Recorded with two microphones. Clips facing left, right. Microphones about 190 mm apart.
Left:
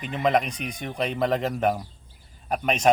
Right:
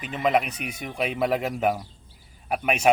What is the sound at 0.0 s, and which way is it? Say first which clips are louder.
Speech: even; 5° right (ahead or behind).